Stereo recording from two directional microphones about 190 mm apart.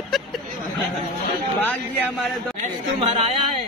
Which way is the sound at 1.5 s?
10° left (ahead or behind).